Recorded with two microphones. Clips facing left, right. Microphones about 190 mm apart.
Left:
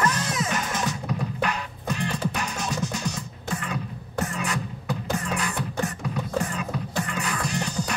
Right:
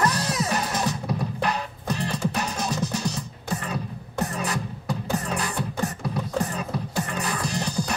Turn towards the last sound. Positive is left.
turn(degrees=-35)  # may be behind; listen again after turning